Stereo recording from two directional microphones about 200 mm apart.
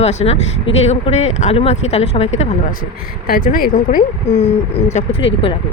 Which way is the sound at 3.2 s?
45° left (ahead or behind).